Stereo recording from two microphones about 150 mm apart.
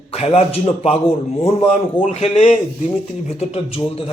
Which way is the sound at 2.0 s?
40° left (ahead or behind).